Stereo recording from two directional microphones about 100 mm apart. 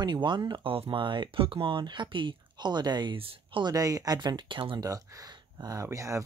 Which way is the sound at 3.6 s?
35° right (ahead or behind).